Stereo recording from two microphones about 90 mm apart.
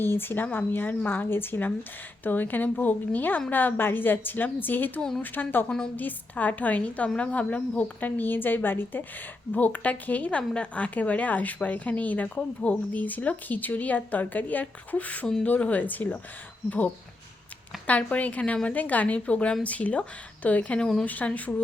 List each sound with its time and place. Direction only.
0.0 s speech: 25° left (ahead or behind)
4.9 s a woman's voice: 5° left (ahead or behind)
5.2 s a woman's voice: 20° left (ahead or behind)